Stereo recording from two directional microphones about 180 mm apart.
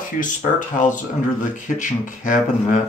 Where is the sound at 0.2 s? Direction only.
45° left (ahead or behind).